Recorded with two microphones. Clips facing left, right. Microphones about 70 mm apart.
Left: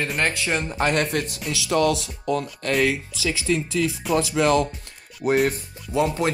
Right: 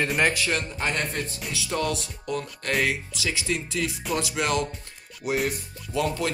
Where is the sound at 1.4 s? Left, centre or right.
Left.